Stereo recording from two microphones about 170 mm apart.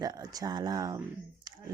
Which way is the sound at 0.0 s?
20° right (ahead or behind).